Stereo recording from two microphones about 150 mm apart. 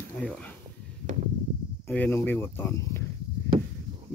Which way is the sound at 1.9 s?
10° left (ahead or behind).